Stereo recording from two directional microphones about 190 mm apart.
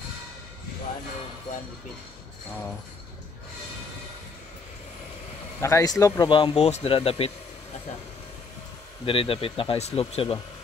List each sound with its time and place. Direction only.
5.6 s speech: 15° left (ahead or behind)
9.0 s speech: 30° left (ahead or behind)